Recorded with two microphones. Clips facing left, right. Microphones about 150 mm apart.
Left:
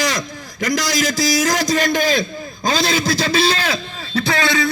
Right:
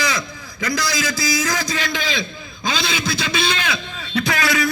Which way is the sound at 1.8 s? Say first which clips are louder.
Left 7 dB; 45° left (ahead or behind).